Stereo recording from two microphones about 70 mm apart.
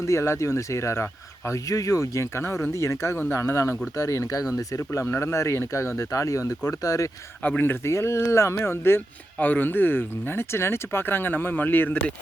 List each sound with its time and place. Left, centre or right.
0.0 s speech: left
7.4 s speech: left
7.9 s speech: left